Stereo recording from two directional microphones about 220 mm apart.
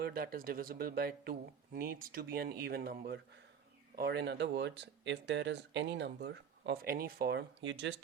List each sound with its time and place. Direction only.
0.0 s speech: 45° right (ahead or behind)